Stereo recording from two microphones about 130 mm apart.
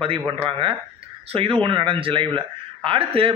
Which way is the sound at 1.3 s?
45° right (ahead or behind).